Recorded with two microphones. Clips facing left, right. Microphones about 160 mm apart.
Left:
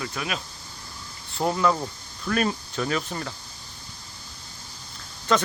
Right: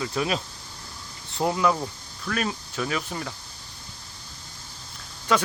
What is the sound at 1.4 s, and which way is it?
Speech, 15° right (ahead or behind).